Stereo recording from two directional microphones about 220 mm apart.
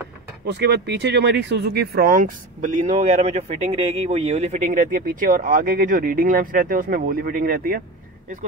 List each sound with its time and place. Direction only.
0.5 s speech: 50° right (ahead or behind)